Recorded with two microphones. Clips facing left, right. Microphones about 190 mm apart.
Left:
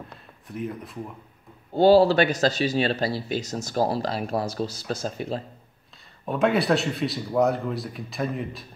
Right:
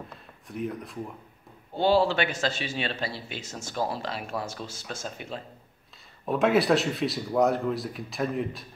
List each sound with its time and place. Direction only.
0.1 s speech: centre (ahead or behind)
1.8 s speech: 40° left (ahead or behind)
6.2 s speech: centre (ahead or behind)